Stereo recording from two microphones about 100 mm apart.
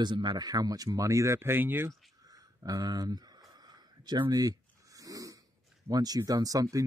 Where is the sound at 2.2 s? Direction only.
35° right (ahead or behind).